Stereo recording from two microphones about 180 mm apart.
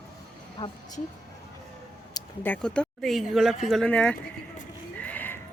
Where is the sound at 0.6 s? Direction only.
20° left (ahead or behind).